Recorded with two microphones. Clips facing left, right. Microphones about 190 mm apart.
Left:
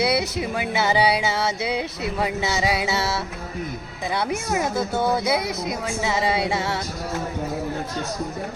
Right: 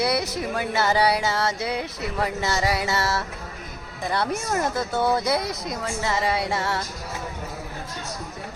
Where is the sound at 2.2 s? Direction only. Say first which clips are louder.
Left 1 dB; 15° left (ahead or behind).